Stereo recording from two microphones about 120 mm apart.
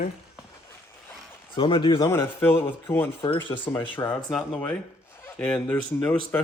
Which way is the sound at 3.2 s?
40° left (ahead or behind).